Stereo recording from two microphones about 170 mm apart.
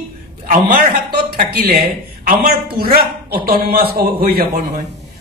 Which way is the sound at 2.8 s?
60° right (ahead or behind).